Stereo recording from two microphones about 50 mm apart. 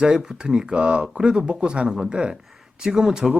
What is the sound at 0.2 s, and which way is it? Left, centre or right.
Speech, centre.